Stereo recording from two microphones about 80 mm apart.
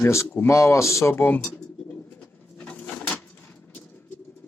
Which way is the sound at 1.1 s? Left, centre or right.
Left.